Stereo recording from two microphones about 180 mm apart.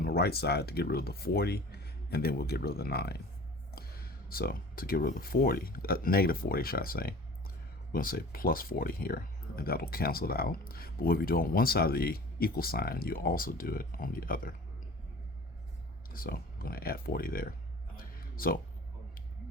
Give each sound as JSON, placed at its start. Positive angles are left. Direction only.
{"t": 0.0, "sound": "speech", "side_deg": 60}
{"t": 16.1, "sound": "speech", "side_deg": 55}
{"t": 17.9, "sound": "a sound", "side_deg": 55}